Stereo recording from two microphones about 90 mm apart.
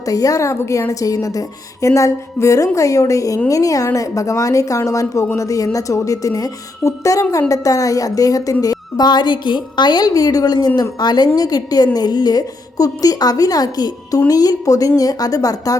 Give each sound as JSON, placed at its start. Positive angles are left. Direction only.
{"t": 0.1, "sound": "a woman's voice", "side_deg": 40}